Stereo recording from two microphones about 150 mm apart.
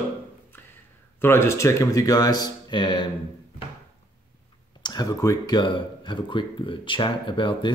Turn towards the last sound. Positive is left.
turn(degrees=35)  # may be behind; listen again after turning